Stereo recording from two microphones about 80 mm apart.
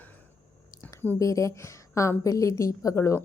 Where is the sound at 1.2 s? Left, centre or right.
Left.